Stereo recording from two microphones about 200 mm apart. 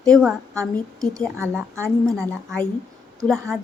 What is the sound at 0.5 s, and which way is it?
Speech, 15° right (ahead or behind).